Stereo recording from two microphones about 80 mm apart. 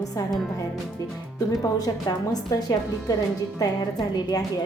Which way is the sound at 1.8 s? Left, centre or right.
Left.